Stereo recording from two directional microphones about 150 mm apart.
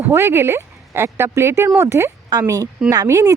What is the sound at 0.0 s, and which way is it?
Speech, 15° right (ahead or behind).